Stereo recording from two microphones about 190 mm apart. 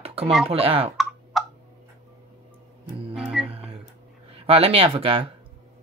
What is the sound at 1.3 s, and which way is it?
Tick-tock, centre (ahead or behind).